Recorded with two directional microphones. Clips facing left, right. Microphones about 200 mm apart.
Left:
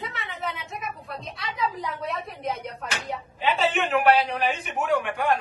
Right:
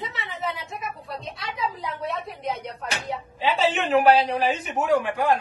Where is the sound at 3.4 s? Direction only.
35° right (ahead or behind).